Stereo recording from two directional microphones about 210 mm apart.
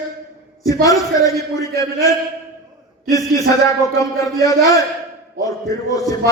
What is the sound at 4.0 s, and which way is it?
Speech, 15° left (ahead or behind).